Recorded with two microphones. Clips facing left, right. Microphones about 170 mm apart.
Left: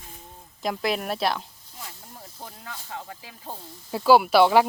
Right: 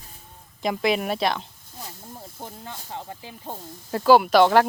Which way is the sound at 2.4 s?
25° right (ahead or behind).